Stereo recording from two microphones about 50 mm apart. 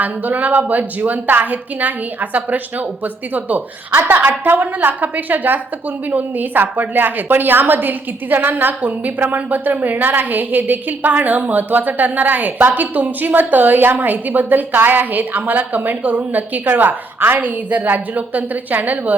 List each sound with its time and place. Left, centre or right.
0.0 s a woman's voice: right
17.3 s a woman's voice: right